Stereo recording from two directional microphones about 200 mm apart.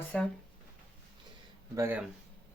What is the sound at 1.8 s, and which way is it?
Speech, 10° right (ahead or behind).